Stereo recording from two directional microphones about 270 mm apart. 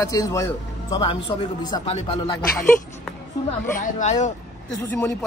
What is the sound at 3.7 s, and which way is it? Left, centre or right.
Speech, left.